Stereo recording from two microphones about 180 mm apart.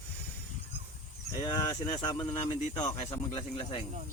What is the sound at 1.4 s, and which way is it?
Speech, 20° left (ahead or behind).